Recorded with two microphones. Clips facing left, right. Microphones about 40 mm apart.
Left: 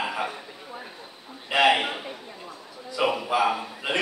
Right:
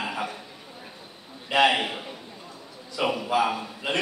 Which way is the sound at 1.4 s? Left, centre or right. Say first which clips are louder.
Left 1 dB; centre.